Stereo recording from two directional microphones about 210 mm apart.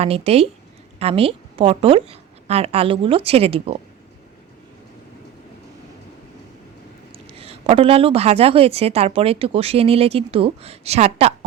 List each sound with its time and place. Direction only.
0.0 s a woman's voice: 30° right (ahead or behind)
7.1 s a woman's voice: 25° right (ahead or behind)